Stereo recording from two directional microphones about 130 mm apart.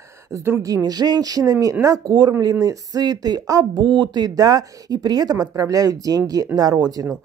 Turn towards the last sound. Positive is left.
turn(degrees=-30)  # may be behind; listen again after turning